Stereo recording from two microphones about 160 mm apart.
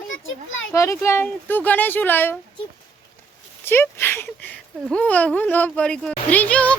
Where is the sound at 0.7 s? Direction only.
15° left (ahead or behind).